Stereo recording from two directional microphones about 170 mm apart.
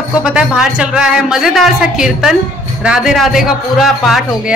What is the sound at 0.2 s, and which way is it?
A woman's voice, 5° right (ahead or behind).